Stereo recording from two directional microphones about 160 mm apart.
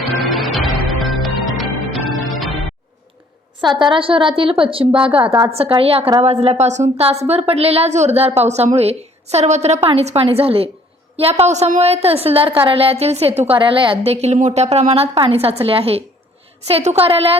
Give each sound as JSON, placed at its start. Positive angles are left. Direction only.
{"t": 0.3, "sound": "music", "side_deg": 0}
{"t": 3.6, "sound": "a woman's voice", "side_deg": -30}